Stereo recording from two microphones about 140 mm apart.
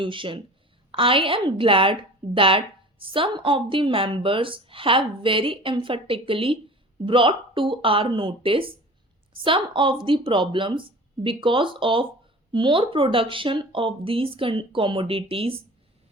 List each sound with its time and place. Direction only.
0.0 s a woman's voice: 35° right (ahead or behind)